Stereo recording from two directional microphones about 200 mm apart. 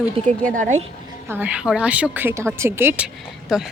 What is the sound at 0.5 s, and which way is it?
Speech, 40° right (ahead or behind).